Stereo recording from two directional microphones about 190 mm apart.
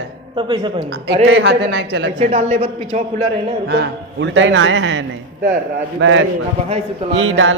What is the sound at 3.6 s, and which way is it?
A man's voice, 65° right (ahead or behind).